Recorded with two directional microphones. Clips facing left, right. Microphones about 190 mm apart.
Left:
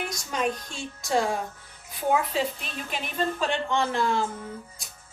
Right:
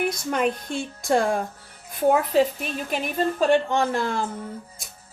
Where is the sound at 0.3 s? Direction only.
55° right (ahead or behind).